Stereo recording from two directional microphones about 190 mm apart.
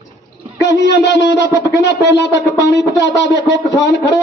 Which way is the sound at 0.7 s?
65° left (ahead or behind).